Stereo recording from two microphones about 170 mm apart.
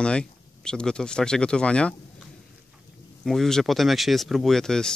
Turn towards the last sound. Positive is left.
turn(degrees=5)  # may be behind; listen again after turning